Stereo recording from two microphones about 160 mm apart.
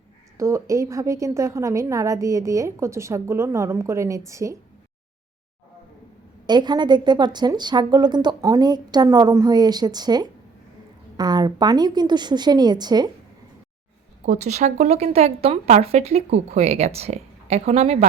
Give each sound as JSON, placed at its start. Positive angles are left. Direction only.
{"t": 0.3, "sound": "a woman's voice", "side_deg": -20}
{"t": 6.5, "sound": "a woman's voice", "side_deg": -25}
{"t": 14.3, "sound": "a woman's voice", "side_deg": -45}